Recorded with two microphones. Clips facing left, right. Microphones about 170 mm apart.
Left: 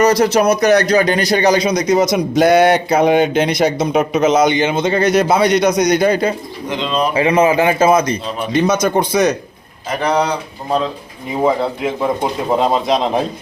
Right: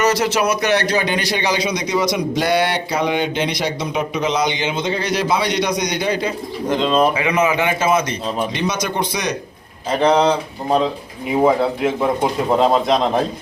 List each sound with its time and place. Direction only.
0.0 s a man's voice: 40° left (ahead or behind)
6.7 s speech: 45° right (ahead or behind)
7.1 s a man's voice: 35° left (ahead or behind); by 9.3 s 50° left (ahead or behind)
9.9 s speech: 25° right (ahead or behind)
11.4 s speech: centre (ahead or behind)